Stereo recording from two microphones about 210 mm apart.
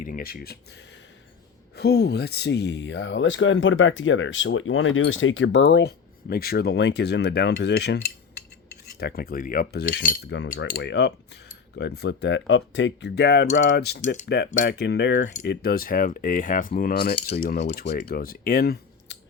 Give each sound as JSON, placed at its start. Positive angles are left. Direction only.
{"t": 0.0, "sound": "speech", "side_deg": 45}
{"t": 1.7, "sound": "speech", "side_deg": 50}
{"t": 9.0, "sound": "speech", "side_deg": 50}
{"t": 15.4, "sound": "speech", "side_deg": 45}